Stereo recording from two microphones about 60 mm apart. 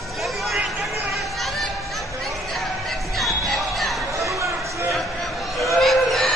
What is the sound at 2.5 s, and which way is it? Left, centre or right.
Music, centre.